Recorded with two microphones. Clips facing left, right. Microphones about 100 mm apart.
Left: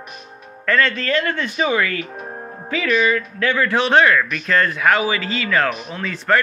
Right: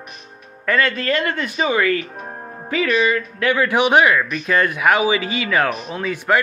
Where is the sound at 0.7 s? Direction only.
15° right (ahead or behind).